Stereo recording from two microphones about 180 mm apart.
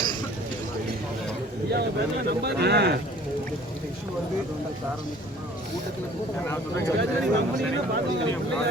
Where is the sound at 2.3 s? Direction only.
65° right (ahead or behind).